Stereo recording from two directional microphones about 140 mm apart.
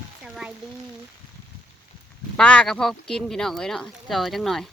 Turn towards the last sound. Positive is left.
turn(degrees=5)  # may be behind; listen again after turning